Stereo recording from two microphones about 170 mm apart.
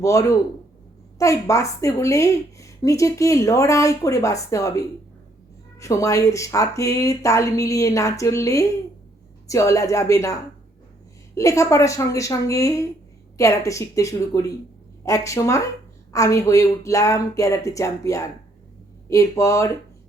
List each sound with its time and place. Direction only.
0.0 s a woman's voice: 20° left (ahead or behind)
11.3 s a woman's voice: 20° left (ahead or behind)